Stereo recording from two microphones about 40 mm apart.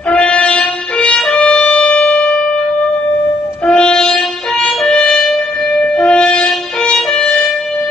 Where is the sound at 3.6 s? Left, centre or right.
Left.